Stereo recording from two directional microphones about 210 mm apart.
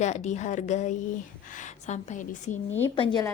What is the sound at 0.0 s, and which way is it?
A woman's voice, 35° left (ahead or behind).